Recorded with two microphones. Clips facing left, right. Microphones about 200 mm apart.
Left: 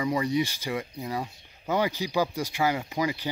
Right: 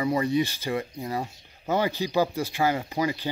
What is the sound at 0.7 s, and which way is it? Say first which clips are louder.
Speech: right 2 dB; 35° right (ahead or behind).